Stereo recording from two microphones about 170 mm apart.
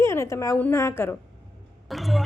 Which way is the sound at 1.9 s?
Centre (ahead or behind).